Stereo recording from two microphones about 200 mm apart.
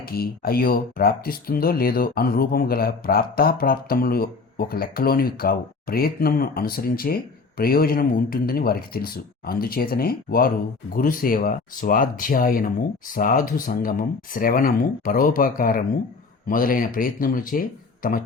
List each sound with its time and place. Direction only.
0.0 s speech: 50° left (ahead or behind)